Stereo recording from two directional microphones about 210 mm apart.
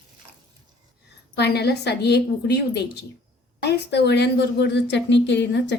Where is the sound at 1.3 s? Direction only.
50° left (ahead or behind).